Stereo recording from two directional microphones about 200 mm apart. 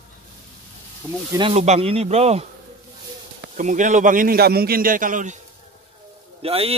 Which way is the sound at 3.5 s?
40° right (ahead or behind).